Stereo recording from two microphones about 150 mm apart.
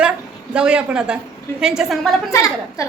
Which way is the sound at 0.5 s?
5° right (ahead or behind).